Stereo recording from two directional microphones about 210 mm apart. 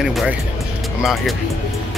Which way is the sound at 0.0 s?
Centre (ahead or behind).